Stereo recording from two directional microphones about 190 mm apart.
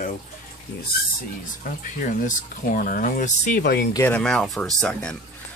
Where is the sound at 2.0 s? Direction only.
45° left (ahead or behind).